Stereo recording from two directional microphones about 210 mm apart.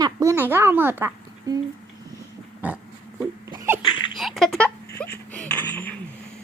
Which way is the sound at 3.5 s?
15° right (ahead or behind).